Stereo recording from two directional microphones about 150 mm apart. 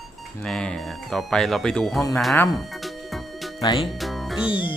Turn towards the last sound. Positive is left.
turn(degrees=35)  # may be behind; listen again after turning